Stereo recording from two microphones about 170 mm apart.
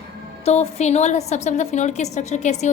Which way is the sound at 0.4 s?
40° left (ahead or behind).